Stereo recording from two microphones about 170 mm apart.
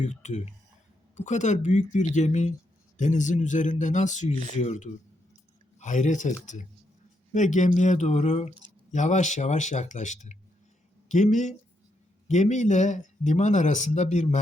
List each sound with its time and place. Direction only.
0.0 s speech: 45° left (ahead or behind)